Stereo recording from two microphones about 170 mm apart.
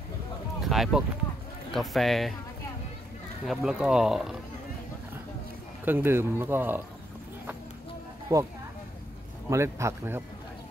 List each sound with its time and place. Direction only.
0.6 s a sound: centre (ahead or behind)
1.7 s speech: centre (ahead or behind)
3.4 s speech: 5° right (ahead or behind)
5.9 s speech: 10° right (ahead or behind)
8.3 s speech: 20° right (ahead or behind)
9.5 s speech: 15° right (ahead or behind)